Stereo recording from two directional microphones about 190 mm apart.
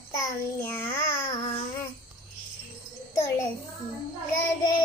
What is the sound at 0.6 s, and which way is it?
Babbling, 10° left (ahead or behind).